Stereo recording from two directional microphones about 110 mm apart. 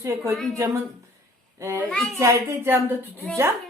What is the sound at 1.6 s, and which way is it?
Speech, 25° right (ahead or behind).